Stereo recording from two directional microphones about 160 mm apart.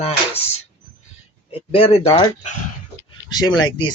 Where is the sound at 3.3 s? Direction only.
25° left (ahead or behind).